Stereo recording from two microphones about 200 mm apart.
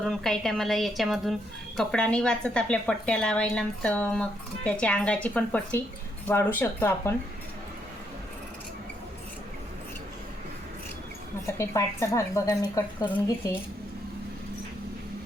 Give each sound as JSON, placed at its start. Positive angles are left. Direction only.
{"t": 0.0, "sound": "a woman's voice", "side_deg": 0}
{"t": 11.5, "sound": "a woman's voice", "side_deg": 15}